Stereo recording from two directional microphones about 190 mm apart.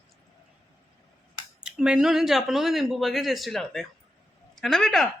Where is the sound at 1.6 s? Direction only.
5° right (ahead or behind).